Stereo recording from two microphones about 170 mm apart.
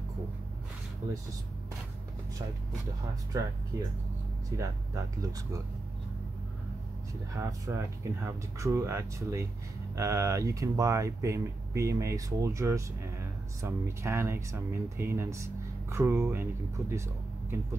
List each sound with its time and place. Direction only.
3.7 s speech: 20° right (ahead or behind)
7.3 s speech: 20° right (ahead or behind)